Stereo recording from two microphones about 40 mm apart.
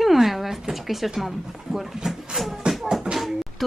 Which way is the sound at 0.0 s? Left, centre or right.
Centre.